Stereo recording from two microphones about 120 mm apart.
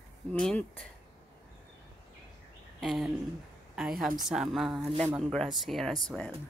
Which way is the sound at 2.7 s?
Centre (ahead or behind).